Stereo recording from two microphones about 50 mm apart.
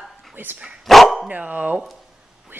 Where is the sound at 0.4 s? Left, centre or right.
Right.